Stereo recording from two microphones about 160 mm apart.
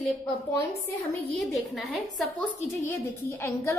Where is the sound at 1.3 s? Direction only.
Centre (ahead or behind).